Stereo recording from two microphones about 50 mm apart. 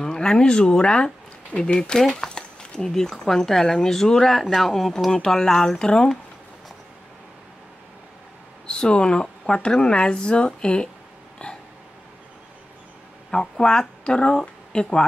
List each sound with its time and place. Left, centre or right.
0.0 s speech: centre
8.6 s speech: centre
11.4 s a sound: left
13.3 s speech: centre